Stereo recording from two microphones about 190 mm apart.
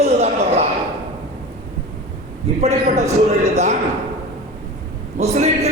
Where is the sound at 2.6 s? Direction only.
35° right (ahead or behind).